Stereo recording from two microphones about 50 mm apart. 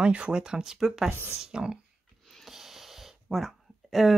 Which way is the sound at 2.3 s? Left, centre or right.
Centre.